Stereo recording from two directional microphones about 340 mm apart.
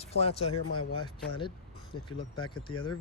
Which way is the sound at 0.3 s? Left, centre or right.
Left.